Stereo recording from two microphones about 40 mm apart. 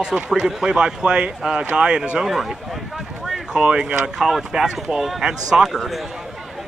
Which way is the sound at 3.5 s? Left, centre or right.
Centre.